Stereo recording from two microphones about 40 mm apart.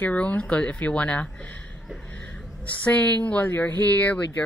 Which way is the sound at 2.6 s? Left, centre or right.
Left.